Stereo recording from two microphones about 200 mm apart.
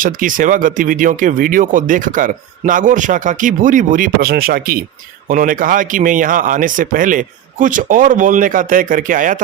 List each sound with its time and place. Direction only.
0.0 s speech: 45° right (ahead or behind)